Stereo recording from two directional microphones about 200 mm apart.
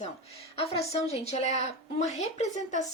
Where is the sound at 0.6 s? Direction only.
30° left (ahead or behind).